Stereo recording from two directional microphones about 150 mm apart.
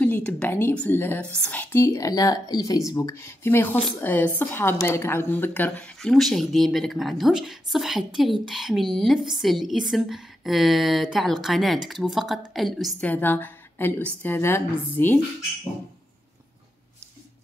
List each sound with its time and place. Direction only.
0.0 s a woman's voice: 10° left (ahead or behind)
13.0 s a woman's voice: 10° left (ahead or behind)